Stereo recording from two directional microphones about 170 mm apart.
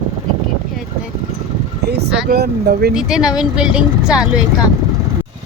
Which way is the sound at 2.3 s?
70° right (ahead or behind).